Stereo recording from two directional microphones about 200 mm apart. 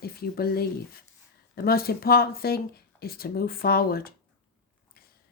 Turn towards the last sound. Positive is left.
turn(degrees=50)  # may be behind; listen again after turning